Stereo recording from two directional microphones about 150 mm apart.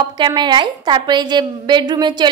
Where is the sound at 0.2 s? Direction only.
30° right (ahead or behind).